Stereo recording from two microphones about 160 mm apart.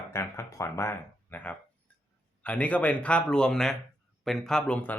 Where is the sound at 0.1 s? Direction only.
15° left (ahead or behind).